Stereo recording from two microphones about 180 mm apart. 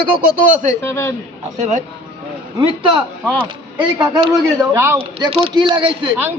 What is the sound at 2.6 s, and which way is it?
A man's voice, 25° right (ahead or behind).